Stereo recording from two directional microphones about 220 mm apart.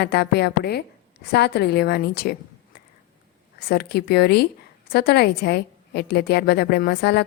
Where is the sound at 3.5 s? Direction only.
45° left (ahead or behind).